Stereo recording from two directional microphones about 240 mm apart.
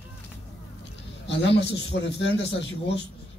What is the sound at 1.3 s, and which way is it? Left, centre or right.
A man's voice, left.